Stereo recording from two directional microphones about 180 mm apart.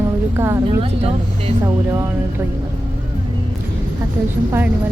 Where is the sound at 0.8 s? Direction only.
35° right (ahead or behind).